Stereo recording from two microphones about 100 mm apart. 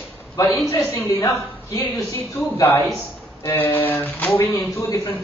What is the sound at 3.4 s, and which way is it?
A man's voice, 20° left (ahead or behind).